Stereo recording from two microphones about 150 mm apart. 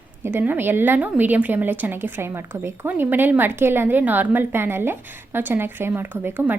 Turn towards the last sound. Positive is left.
turn(degrees=-15)  # may be behind; listen again after turning